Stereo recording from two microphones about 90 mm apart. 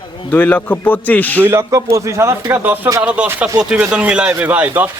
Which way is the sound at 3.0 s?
15° right (ahead or behind).